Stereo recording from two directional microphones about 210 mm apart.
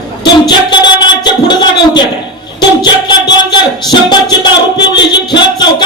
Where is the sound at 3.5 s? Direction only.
20° left (ahead or behind).